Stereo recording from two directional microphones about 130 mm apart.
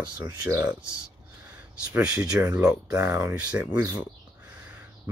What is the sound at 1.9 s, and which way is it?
Speech, 25° right (ahead or behind).